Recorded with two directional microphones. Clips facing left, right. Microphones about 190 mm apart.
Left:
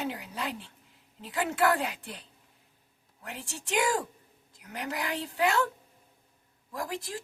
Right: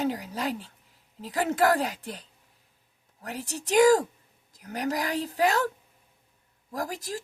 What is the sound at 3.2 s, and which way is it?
A woman's voice, 40° right (ahead or behind).